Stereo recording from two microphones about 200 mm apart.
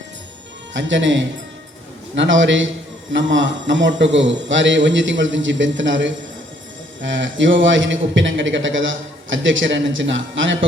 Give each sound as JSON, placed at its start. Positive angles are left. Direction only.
{"t": 0.7, "sound": "a man's voice", "side_deg": -65}